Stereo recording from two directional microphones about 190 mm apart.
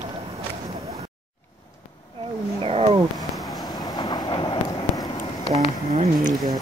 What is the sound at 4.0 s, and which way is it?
Vehicle, 20° left (ahead or behind).